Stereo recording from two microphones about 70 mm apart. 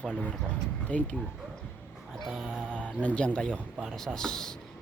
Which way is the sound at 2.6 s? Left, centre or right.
Centre.